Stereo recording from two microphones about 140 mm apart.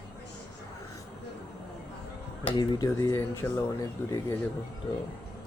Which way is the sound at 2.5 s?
30° left (ahead or behind).